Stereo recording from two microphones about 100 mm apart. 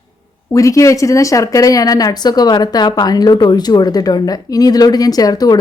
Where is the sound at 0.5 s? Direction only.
30° left (ahead or behind).